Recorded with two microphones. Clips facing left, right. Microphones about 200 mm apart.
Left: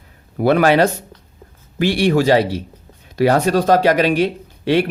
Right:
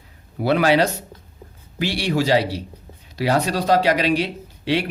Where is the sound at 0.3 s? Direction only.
50° left (ahead or behind).